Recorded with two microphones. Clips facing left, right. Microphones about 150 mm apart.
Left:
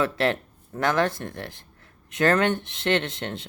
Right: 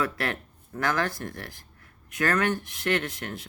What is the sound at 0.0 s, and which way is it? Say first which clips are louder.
Speech: left 6 dB; 25° left (ahead or behind).